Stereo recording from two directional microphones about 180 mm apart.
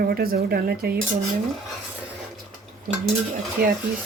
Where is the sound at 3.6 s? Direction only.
60° right (ahead or behind).